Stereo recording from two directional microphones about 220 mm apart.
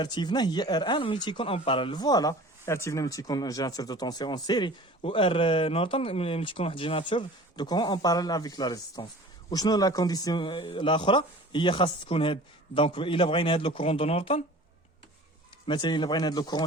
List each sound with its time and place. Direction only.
0.0 s speech: 20° left (ahead or behind)
15.6 s speech: 20° left (ahead or behind)